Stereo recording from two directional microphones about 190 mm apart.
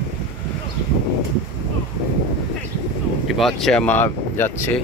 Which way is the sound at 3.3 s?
Centre (ahead or behind).